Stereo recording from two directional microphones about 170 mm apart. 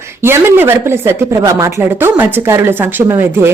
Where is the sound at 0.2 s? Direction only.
15° right (ahead or behind).